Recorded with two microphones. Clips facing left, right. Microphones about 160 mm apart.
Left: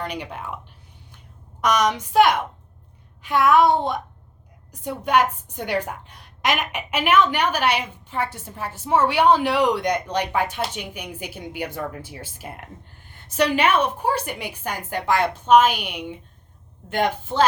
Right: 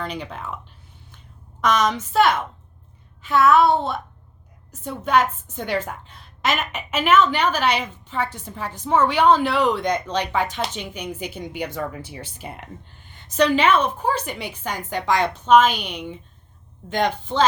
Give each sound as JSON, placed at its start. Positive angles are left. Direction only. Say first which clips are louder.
{"t": 0.0, "sound": "a woman's voice", "louder": "even", "side_deg": 10}
{"t": 1.6, "sound": "a woman's voice", "louder": "even", "side_deg": 10}